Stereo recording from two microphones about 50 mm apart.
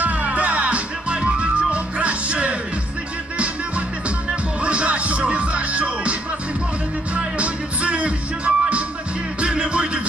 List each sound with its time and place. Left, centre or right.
0.0 s music: right
4.6 s music: right
7.2 s music: right